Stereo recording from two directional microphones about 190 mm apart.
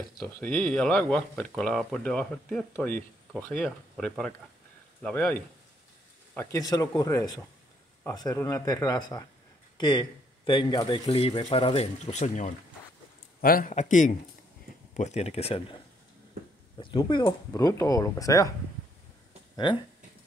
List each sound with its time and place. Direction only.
0.2 s speech: 5° left (ahead or behind); by 12.5 s 40° left (ahead or behind)
13.4 s speech: 50° left (ahead or behind); by 15.8 s 30° left (ahead or behind)
16.8 s speech: 25° left (ahead or behind)
19.5 s speech: 25° left (ahead or behind)